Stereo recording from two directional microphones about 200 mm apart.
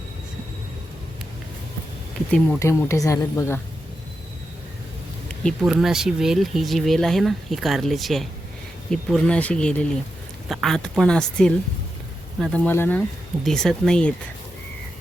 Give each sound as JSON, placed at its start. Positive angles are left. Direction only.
{"t": 2.6, "sound": "speech", "side_deg": 15}
{"t": 5.3, "sound": "speech", "side_deg": 5}